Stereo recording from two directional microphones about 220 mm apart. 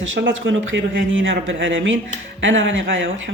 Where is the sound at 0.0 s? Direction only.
55° right (ahead or behind).